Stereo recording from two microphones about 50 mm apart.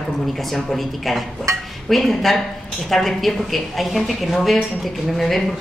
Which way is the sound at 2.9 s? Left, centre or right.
Centre.